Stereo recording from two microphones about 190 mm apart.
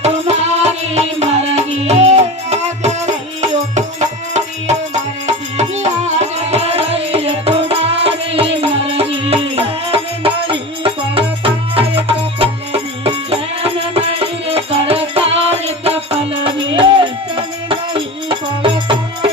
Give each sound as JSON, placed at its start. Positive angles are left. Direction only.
{"t": 0.0, "sound": "music", "side_deg": -35}
{"t": 4.4, "sound": "music", "side_deg": -35}